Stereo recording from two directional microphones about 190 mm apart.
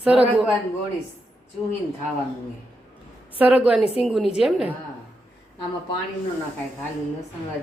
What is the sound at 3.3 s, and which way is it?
Speech, 5° right (ahead or behind).